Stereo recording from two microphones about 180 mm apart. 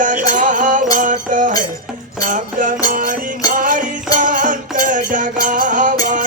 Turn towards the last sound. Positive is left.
turn(degrees=-45)  # may be behind; listen again after turning